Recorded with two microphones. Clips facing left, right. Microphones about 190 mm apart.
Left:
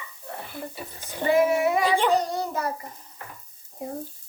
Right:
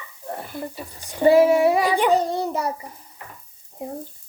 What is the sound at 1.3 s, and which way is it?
Child singing, 30° right (ahead or behind).